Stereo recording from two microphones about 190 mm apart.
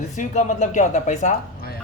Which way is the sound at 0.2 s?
40° left (ahead or behind).